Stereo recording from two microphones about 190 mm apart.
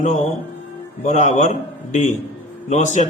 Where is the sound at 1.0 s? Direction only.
40° left (ahead or behind).